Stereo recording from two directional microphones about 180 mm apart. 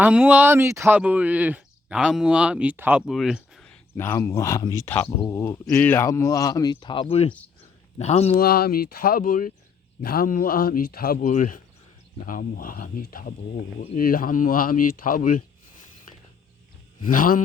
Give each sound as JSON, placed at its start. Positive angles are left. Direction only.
{"t": 0.0, "sound": "a man's voice", "side_deg": -10}
{"t": 8.4, "sound": "a man's voice", "side_deg": 60}
{"t": 17.1, "sound": "speech", "side_deg": 50}